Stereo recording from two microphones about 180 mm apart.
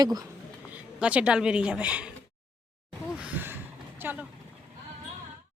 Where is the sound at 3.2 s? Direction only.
10° right (ahead or behind).